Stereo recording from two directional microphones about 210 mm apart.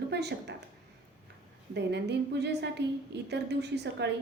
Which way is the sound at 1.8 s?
55° right (ahead or behind).